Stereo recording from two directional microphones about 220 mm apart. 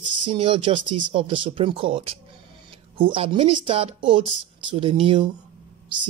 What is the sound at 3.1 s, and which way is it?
Speech, 25° right (ahead or behind).